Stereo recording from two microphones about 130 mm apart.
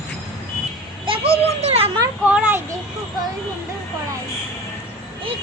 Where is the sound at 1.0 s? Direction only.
45° right (ahead or behind).